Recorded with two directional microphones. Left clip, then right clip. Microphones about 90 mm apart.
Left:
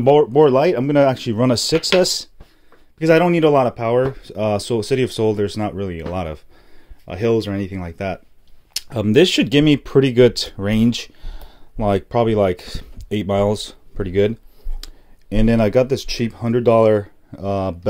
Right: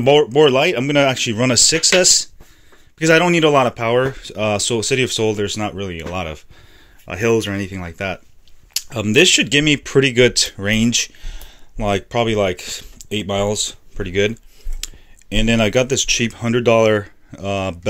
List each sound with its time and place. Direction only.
0.0 s speech: 30° left (ahead or behind)
3.0 s speech: 15° left (ahead or behind); by 6.4 s 50° left (ahead or behind)
7.1 s speech: 20° left (ahead or behind); by 8.2 s 40° left (ahead or behind)
8.7 s speech: 55° left (ahead or behind)
14.8 s speech: 35° left (ahead or behind)